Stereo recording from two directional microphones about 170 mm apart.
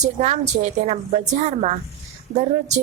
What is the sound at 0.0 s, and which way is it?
A woman's voice, 40° right (ahead or behind).